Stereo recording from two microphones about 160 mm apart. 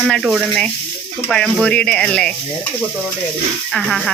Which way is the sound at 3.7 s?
5° left (ahead or behind).